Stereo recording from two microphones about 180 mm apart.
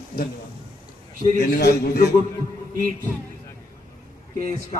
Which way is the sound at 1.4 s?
50° left (ahead or behind).